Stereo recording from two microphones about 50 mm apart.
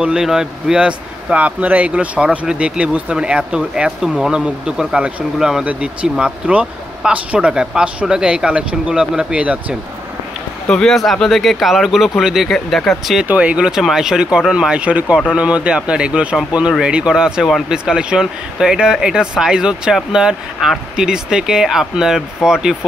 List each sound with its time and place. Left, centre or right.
0.0 s speech: centre
1.3 s speech: right
10.7 s speech: centre
11.0 s speech: centre
12.4 s speech: centre
13.3 s speech: right
13.6 s speech: centre
14.8 s speech: right